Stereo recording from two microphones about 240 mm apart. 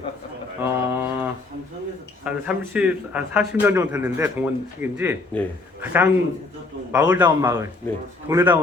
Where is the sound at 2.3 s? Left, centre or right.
Centre.